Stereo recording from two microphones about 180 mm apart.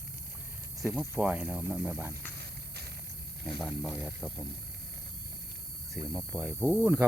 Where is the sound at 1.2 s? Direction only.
10° right (ahead or behind).